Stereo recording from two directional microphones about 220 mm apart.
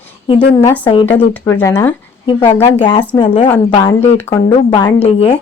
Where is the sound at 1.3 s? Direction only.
10° left (ahead or behind); by 5.3 s 25° left (ahead or behind).